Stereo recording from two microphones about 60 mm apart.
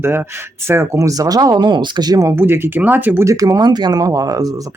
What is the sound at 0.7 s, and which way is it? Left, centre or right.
Speech, right.